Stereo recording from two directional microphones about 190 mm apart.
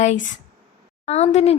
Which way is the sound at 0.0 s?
40° left (ahead or behind).